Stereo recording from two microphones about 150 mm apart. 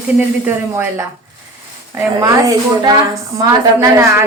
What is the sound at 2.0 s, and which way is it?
A woman's voice, 25° right (ahead or behind).